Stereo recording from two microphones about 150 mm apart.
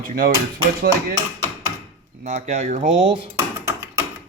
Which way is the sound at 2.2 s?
50° right (ahead or behind).